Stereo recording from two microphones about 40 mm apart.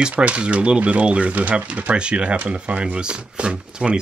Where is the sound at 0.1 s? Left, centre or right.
Right.